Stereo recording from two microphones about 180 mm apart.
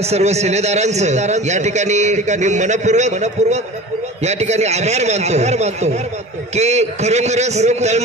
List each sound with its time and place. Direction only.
0.0 s a man's voice: 35° right (ahead or behind)